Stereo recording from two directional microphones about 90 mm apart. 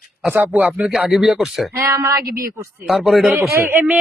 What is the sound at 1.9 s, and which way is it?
Speech, 35° right (ahead or behind).